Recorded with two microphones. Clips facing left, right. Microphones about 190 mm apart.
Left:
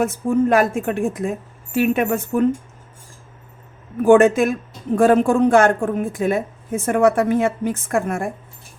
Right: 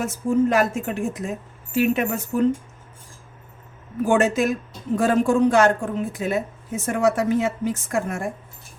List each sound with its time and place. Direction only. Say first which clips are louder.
0.0 s speech: left 2 dB; 55° left (ahead or behind)
4.0 s speech: left 7 dB; 55° left (ahead or behind)